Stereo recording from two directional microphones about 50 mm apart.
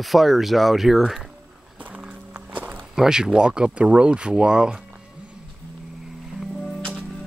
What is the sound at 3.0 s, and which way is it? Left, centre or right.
Speech, centre.